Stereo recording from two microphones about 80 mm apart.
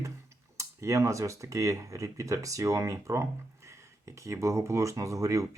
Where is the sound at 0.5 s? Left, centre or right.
Right.